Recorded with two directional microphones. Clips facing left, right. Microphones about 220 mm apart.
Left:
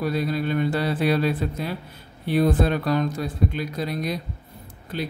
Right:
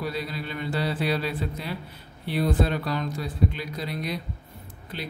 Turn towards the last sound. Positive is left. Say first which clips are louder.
# left 6 dB
turn(degrees=45)  # may be behind; listen again after turning